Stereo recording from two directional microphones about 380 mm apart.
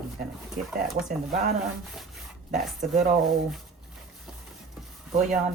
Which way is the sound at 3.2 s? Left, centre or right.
Centre.